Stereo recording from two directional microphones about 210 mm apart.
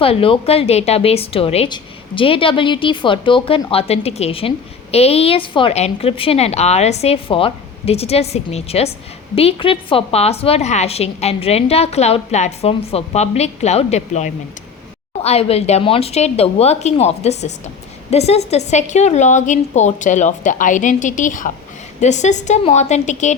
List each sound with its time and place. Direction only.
0.0 s a woman's voice: 25° left (ahead or behind)